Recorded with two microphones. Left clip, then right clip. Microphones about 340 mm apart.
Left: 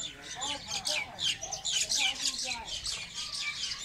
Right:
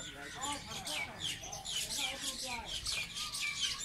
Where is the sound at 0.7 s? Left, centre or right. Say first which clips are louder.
Left 7 dB; left.